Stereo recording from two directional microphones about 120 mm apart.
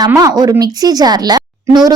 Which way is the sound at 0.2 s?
30° right (ahead or behind).